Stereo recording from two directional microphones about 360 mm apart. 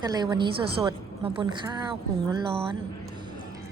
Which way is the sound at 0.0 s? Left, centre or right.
Centre.